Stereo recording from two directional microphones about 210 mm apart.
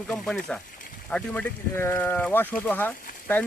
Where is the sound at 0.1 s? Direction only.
5° left (ahead or behind).